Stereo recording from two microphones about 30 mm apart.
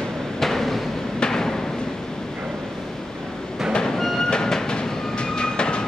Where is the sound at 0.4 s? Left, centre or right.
Centre.